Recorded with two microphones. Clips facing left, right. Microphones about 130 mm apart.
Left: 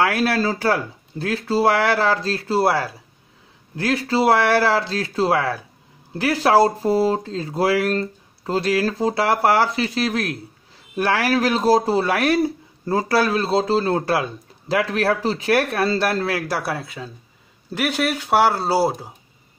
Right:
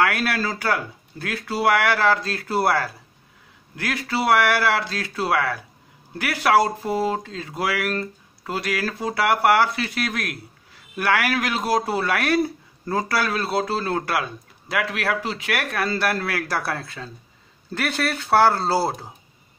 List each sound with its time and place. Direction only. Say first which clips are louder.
0.0 s speech: left 3 dB; 30° left (ahead or behind); by 19.0 s 10° left (ahead or behind)